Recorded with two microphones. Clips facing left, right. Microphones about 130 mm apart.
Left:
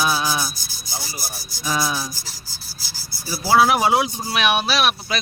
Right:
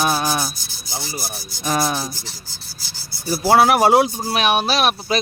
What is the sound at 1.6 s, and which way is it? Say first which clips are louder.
Speech: right 3 dB; 50° right (ahead or behind).